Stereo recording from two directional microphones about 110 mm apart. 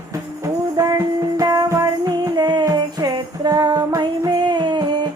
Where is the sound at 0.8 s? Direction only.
30° right (ahead or behind).